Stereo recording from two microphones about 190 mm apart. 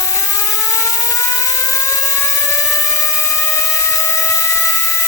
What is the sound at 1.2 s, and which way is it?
Whir, 15° left (ahead or behind).